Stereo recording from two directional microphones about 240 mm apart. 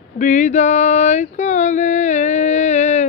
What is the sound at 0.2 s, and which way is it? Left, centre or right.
Female singing, left.